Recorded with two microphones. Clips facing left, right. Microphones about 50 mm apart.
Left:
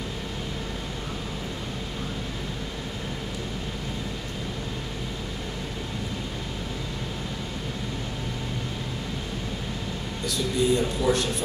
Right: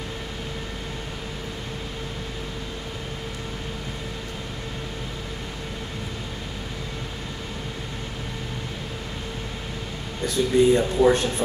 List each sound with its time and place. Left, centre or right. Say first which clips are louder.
10.2 s speech: right 6 dB; right